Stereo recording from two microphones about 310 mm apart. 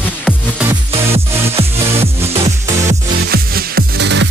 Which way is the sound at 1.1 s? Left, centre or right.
Centre.